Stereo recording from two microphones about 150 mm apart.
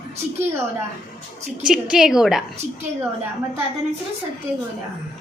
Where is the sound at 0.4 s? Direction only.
15° right (ahead or behind).